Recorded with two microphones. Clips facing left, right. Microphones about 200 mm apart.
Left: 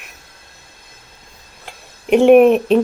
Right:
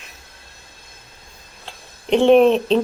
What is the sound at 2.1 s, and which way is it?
Speech, 10° left (ahead or behind).